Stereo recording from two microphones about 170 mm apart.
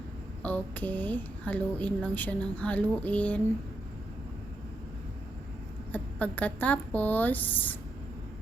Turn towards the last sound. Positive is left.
turn(degrees=10)  # may be behind; listen again after turning